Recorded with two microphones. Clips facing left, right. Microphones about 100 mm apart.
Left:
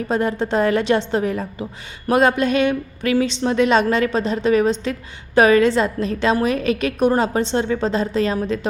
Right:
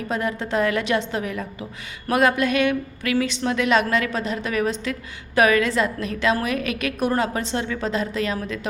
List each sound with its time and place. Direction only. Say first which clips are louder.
0.1 s a woman's voice: left 5 dB; 30° left (ahead or behind)